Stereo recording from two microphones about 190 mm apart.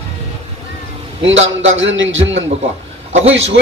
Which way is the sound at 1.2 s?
85° right.